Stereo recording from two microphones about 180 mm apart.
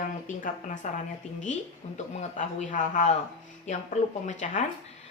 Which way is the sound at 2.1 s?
45° left (ahead or behind).